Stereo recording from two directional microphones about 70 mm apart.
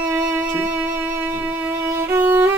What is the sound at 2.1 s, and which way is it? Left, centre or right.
Violin, right.